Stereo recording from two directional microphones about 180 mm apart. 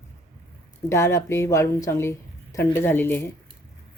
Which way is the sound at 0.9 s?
15° left (ahead or behind).